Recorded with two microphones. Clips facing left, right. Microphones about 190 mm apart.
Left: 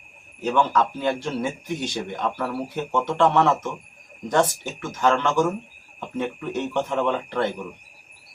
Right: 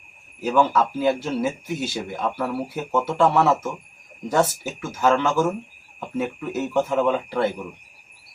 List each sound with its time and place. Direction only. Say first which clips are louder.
0.4 s speech: right 2 dB; 5° right (ahead or behind)